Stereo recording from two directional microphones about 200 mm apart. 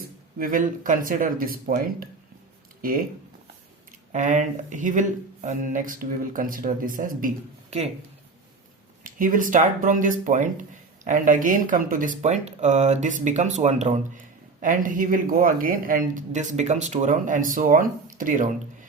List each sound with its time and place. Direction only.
0.3 s speech: 45° right (ahead or behind)
4.1 s speech: 35° right (ahead or behind)
9.0 s speech: 40° right (ahead or behind)